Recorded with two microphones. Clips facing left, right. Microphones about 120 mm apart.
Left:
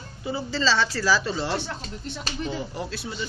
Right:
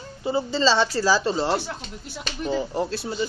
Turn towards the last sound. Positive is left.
turn(degrees=-35)  # may be behind; listen again after turning